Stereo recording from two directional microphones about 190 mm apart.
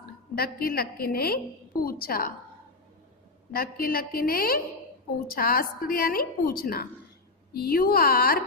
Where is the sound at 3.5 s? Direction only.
50° left (ahead or behind).